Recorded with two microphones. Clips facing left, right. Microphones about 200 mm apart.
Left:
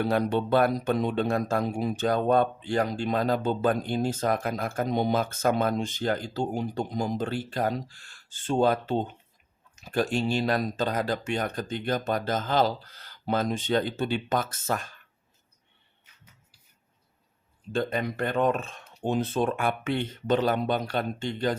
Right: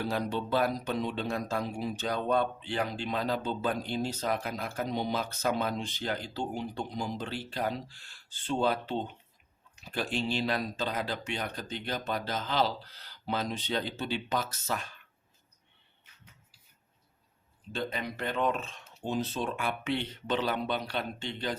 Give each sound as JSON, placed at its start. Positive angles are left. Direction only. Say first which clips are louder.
{"t": 0.0, "sound": "speech", "louder": "left 7 dB", "side_deg": 60}
{"t": 17.7, "sound": "speech", "louder": "left 7 dB", "side_deg": 50}